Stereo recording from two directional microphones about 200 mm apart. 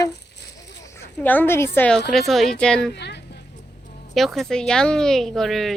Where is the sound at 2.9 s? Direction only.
60° left (ahead or behind).